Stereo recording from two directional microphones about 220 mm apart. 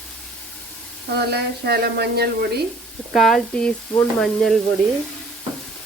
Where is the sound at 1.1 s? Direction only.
45° right (ahead or behind).